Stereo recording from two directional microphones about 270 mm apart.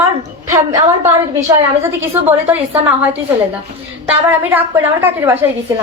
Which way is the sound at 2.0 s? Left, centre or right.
Centre.